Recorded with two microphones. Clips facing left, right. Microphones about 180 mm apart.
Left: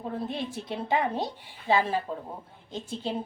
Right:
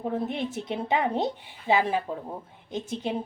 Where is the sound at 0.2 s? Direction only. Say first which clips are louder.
Right 3 dB; 20° right (ahead or behind).